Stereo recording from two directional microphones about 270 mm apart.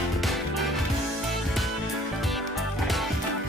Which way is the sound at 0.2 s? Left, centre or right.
Centre.